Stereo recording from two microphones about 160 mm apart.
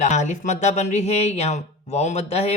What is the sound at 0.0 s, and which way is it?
Speech, 45° left (ahead or behind).